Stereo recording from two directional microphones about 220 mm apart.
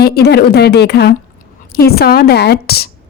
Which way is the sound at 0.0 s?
45° left (ahead or behind).